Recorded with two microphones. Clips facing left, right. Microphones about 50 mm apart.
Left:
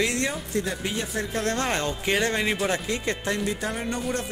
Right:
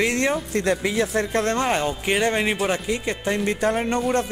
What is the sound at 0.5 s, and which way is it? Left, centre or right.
Speech, right.